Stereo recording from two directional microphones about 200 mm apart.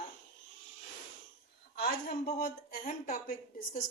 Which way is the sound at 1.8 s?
50° left (ahead or behind).